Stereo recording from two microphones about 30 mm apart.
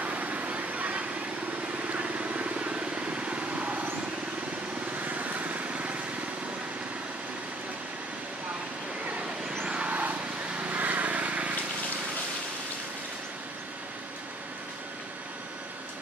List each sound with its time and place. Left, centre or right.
0.2 s a sound: right
1.9 s vehicle: right
5.0 s lawn mower: right
9.8 s vehicle: right
10.6 s vehicle: right